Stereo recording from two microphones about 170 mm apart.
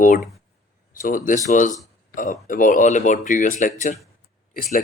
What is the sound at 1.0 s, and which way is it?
Speech, 50° left (ahead or behind).